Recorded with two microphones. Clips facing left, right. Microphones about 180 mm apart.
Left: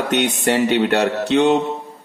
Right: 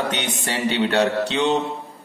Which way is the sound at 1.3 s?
55° left (ahead or behind).